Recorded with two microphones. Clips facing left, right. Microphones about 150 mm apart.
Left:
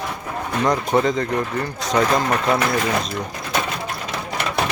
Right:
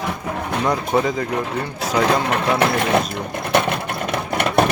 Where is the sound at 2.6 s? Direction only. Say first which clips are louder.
Right 3 dB; 65° right (ahead or behind).